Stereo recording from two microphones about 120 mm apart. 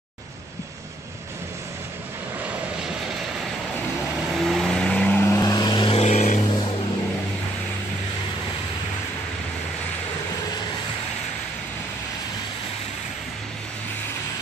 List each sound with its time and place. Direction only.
4.3 s vehicle: centre (ahead or behind); by 5.9 s 40° left (ahead or behind)
5.9 s vehicle: 70° left (ahead or behind)